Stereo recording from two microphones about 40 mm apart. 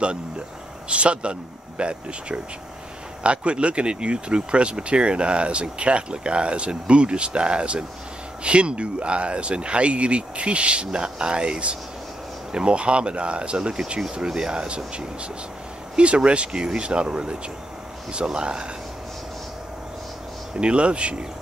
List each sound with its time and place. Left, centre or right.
0.8 s speech: right
16.0 s speech: right
20.5 s speech: right